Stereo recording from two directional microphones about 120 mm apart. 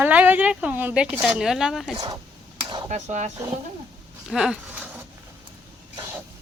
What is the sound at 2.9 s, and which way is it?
Speech, 75° right (ahead or behind).